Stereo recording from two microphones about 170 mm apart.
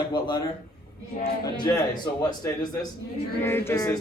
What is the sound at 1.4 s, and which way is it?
Speech, 25° left (ahead or behind).